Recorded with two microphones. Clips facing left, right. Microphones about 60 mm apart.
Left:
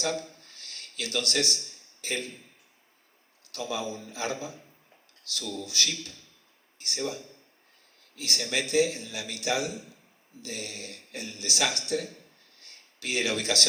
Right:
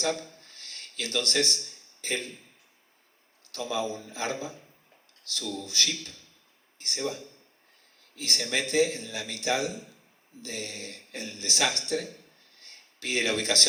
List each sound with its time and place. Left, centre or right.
0.0 s speech: right
3.5 s a man's voice: right
12.5 s a sound: right